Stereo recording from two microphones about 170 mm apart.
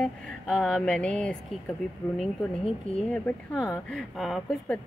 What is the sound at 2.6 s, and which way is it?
Speech, 35° left (ahead or behind).